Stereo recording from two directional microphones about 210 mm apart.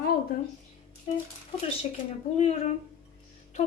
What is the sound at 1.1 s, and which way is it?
Speech, 25° left (ahead or behind).